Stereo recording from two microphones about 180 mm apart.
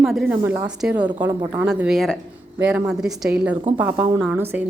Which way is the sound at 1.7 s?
5° right (ahead or behind).